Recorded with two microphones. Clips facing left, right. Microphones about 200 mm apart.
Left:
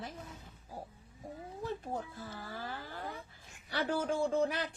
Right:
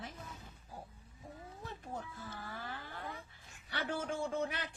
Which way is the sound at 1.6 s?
35° left (ahead or behind).